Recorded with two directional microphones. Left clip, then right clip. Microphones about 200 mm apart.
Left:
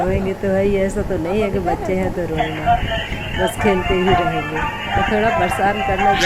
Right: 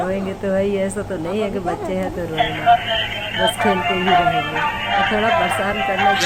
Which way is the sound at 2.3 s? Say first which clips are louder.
Right 4 dB; 40° right (ahead or behind).